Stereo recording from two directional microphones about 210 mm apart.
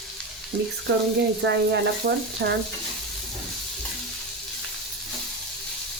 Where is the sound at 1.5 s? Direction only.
55° right (ahead or behind).